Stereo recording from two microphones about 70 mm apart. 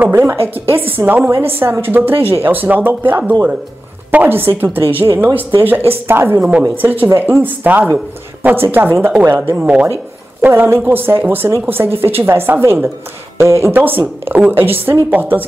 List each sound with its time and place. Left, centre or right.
0.1 s speech: right
9.6 s speech: centre
10.4 s speech: right